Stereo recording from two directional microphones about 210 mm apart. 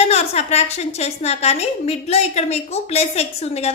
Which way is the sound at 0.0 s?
30° left (ahead or behind).